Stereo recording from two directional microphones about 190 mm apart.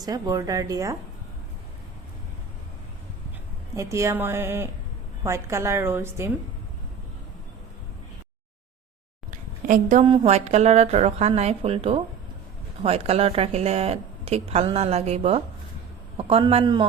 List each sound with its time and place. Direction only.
0.0 s speech: 20° right (ahead or behind)
3.8 s a woman's voice: 15° right (ahead or behind)
9.3 s a sound: 45° right (ahead or behind)
10.1 s speech: 35° right (ahead or behind)